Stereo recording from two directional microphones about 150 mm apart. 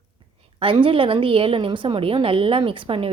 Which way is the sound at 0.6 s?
35° right (ahead or behind).